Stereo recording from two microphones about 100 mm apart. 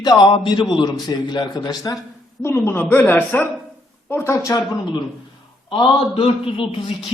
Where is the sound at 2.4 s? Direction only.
25° left (ahead or behind).